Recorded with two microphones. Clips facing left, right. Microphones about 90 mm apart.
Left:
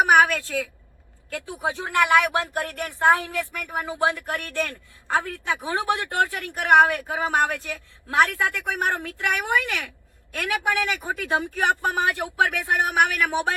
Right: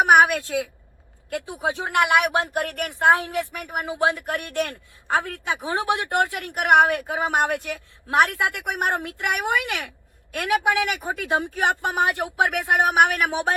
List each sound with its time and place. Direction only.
0.0 s a woman's voice: 20° right (ahead or behind)